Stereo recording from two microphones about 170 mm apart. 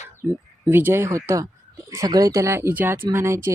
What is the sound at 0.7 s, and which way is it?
A woman's voice, 15° right (ahead or behind).